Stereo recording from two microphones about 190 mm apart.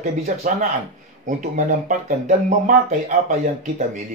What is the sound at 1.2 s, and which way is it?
Speech, 40° right (ahead or behind).